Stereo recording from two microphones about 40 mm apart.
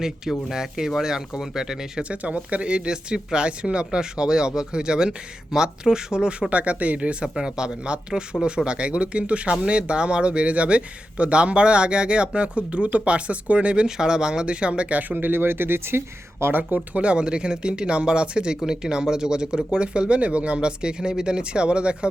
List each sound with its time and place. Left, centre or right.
0.0 s speech: centre
2.0 s speech: right
6.5 s speech: right
7.3 s speech: centre
13.8 s speech: centre
15.1 s speech: right
16.6 s speech: right
17.0 s speech: right